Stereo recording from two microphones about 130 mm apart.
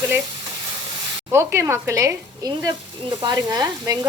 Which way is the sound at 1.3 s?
20° right (ahead or behind).